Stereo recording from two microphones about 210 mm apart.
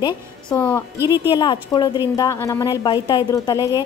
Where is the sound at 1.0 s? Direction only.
10° right (ahead or behind).